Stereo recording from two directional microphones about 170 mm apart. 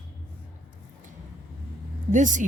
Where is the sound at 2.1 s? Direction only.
50° right (ahead or behind).